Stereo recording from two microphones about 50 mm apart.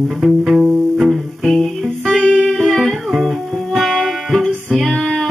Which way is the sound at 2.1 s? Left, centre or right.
Left.